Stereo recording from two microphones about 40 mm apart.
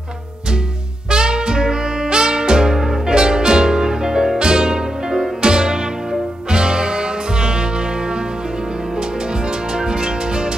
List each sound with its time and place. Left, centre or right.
1.1 s music: right